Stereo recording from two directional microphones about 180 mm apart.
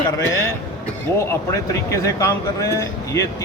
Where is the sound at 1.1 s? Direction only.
15° left (ahead or behind).